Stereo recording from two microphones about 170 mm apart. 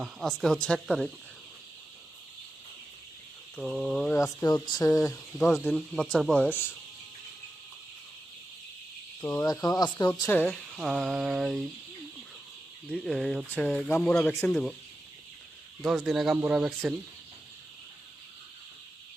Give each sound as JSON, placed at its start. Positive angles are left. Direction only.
{"t": 0.0, "sound": "speech", "side_deg": 0}
{"t": 3.5, "sound": "speech", "side_deg": 0}
{"t": 4.1, "sound": "speech", "side_deg": 15}
{"t": 5.1, "sound": "speech", "side_deg": 5}
{"t": 9.2, "sound": "speech", "side_deg": 20}
{"t": 10.1, "sound": "speech", "side_deg": 10}
{"t": 10.5, "sound": "speech", "side_deg": 0}
{"t": 12.9, "sound": "speech", "side_deg": 0}
{"t": 16.0, "sound": "speech", "side_deg": 0}